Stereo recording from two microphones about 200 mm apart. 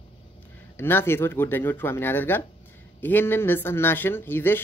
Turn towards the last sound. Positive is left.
turn(degrees=10)  # may be behind; listen again after turning